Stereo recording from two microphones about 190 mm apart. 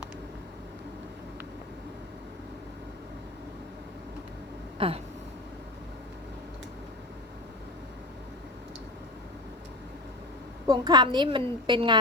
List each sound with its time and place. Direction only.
4.8 s a woman's voice: 30° right (ahead or behind)
10.7 s a woman's voice: 25° right (ahead or behind)